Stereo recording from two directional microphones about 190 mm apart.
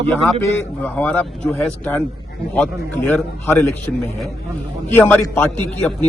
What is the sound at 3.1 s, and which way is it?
Speech, 10° left (ahead or behind).